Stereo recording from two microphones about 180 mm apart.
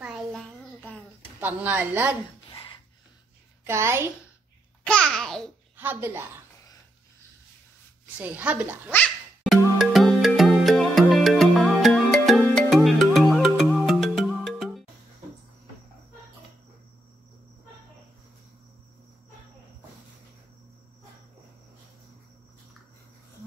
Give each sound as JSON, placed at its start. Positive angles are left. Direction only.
{"t": 0.0, "sound": "a sound", "side_deg": 0}
{"t": 1.4, "sound": "speech", "side_deg": -10}
{"t": 2.5, "sound": "a sound", "side_deg": 25}
{"t": 3.6, "sound": "speech", "side_deg": -15}
{"t": 4.8, "sound": "babbling", "side_deg": 5}
{"t": 5.8, "sound": "speech", "side_deg": -10}
{"t": 8.2, "sound": "speech", "side_deg": -5}
{"t": 8.9, "sound": "music", "side_deg": 5}